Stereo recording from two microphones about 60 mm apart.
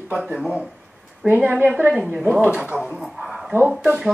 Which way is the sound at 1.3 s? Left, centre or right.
Right.